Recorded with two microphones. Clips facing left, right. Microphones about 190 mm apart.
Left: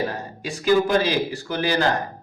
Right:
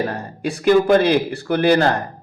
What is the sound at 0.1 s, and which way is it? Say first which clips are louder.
Speech: right 6 dB; 60° right (ahead or behind).